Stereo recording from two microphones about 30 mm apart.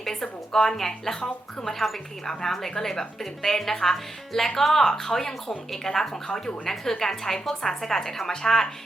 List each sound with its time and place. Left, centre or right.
0.0 s speech: centre